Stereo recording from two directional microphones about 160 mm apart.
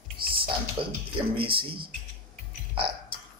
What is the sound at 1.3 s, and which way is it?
Speech, 35° right (ahead or behind).